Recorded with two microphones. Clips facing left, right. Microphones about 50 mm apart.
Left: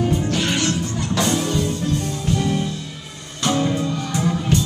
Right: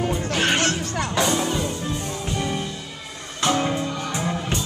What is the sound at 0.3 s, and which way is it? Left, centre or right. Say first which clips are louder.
Music: even; right.